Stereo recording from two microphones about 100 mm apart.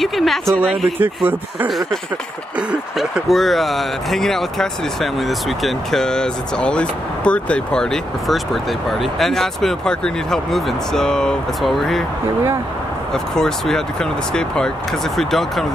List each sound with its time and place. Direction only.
0.0 s speech: centre (ahead or behind)
0.9 s speech: 20° right (ahead or behind)
1.7 s speech: centre (ahead or behind)
13.1 s speech: 5° left (ahead or behind)